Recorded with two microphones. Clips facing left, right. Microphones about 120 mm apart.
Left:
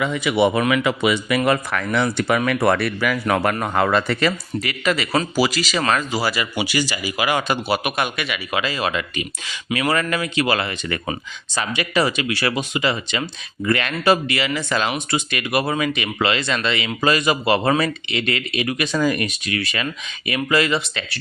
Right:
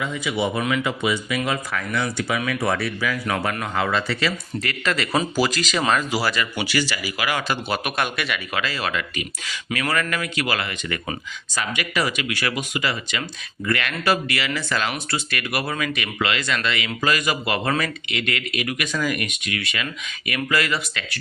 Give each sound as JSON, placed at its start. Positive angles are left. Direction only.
{"t": 0.0, "sound": "speech", "side_deg": 70}
{"t": 1.5, "sound": "speech", "side_deg": 65}
{"t": 3.5, "sound": "speech", "side_deg": 45}
{"t": 4.6, "sound": "speech", "side_deg": 10}
{"t": 6.3, "sound": "speech", "side_deg": 15}
{"t": 7.7, "sound": "speech", "side_deg": 5}
{"t": 8.5, "sound": "speech", "side_deg": 20}